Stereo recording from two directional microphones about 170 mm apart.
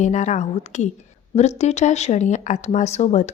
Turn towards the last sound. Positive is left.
turn(degrees=40)  # may be behind; listen again after turning